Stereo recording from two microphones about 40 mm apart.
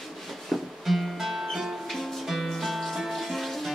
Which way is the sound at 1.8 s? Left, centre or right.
Centre.